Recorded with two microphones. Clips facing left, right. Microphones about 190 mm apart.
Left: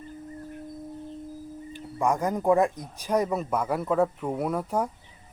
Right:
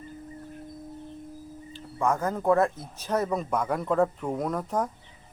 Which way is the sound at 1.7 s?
15° left (ahead or behind).